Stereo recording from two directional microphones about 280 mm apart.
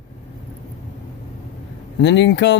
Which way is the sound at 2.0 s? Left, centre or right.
Left.